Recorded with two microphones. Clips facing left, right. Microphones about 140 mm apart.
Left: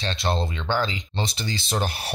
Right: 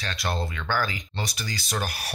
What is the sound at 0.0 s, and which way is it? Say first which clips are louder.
Speech: left 4 dB; 25° left (ahead or behind).